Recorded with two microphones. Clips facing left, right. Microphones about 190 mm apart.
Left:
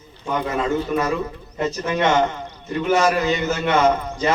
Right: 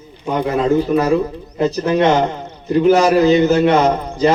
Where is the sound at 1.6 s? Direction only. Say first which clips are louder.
Right 6 dB; 35° right (ahead or behind).